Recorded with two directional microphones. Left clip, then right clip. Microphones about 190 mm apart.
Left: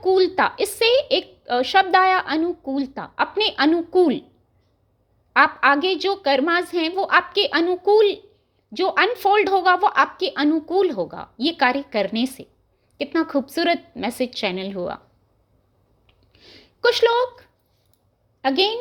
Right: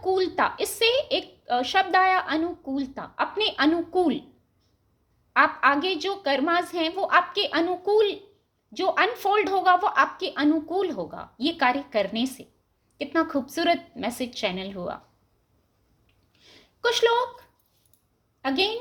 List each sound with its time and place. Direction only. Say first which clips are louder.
0.0 s a woman's voice: left 6 dB; 40° left (ahead or behind)
5.3 s a woman's voice: left 4 dB; 40° left (ahead or behind)
16.3 s a sound: left 6 dB; 40° left (ahead or behind)
18.4 s a woman's voice: left 5 dB; 40° left (ahead or behind)